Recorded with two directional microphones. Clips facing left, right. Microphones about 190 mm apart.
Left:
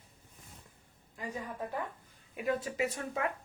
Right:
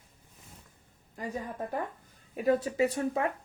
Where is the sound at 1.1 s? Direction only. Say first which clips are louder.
Right 3 dB; 45° right (ahead or behind).